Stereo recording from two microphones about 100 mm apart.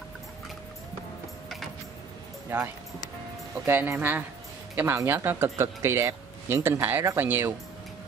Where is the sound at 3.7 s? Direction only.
20° right (ahead or behind).